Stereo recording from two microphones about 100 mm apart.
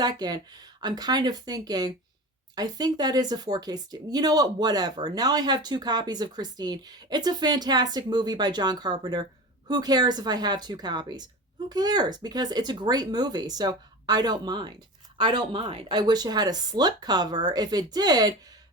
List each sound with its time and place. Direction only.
0.0 s speech: 40° right (ahead or behind); by 15.9 s 65° right (ahead or behind)
15.9 s speech: 45° right (ahead or behind)